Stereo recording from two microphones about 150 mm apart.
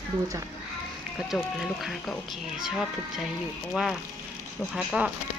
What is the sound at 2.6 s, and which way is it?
Speech, 5° right (ahead or behind).